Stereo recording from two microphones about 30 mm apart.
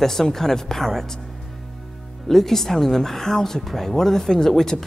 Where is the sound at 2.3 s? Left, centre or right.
Centre.